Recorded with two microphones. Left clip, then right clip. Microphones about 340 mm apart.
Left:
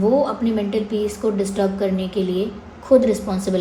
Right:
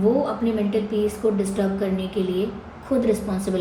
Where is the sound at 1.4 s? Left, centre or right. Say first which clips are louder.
Left 4 dB; left.